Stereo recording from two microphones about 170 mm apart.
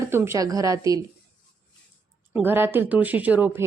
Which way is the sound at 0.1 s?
15° right (ahead or behind).